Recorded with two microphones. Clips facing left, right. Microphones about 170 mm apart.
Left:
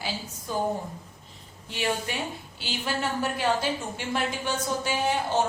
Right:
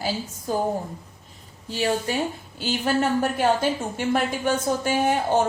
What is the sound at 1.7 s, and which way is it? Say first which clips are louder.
A woman's voice: right 5 dB; 35° right (ahead or behind).